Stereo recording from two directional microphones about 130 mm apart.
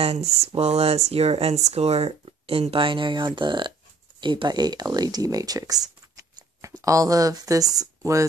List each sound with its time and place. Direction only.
0.0 s speech: 55° right (ahead or behind); by 5.8 s 30° right (ahead or behind)
6.3 s a sound: 25° right (ahead or behind)
7.7 s speech: 25° right (ahead or behind)